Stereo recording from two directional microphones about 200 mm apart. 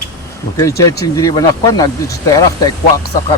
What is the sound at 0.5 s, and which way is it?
Speech, 15° left (ahead or behind).